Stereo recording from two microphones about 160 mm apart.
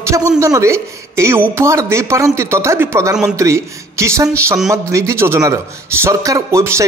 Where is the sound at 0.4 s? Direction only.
20° right (ahead or behind).